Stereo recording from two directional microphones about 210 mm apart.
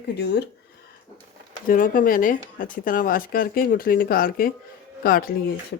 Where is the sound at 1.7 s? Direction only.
40° left (ahead or behind).